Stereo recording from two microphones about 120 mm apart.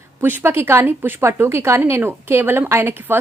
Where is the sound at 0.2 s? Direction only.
15° right (ahead or behind).